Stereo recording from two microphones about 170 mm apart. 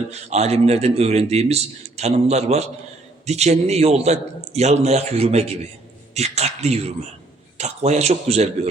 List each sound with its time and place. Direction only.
0.1 s a man's voice: 40° right (ahead or behind)